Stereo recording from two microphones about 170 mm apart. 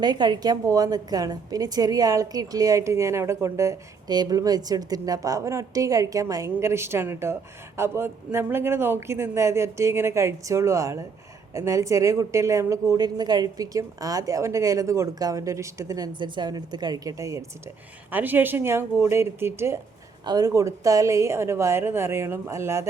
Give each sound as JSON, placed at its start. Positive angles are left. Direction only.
{"t": 0.0, "sound": "a woman's voice", "side_deg": -25}